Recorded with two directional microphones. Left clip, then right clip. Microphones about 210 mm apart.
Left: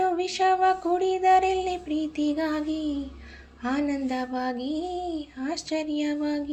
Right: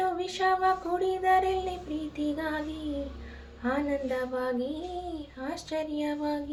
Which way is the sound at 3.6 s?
40° left (ahead or behind).